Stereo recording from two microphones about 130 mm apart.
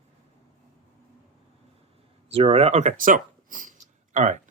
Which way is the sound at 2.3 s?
50° right (ahead or behind).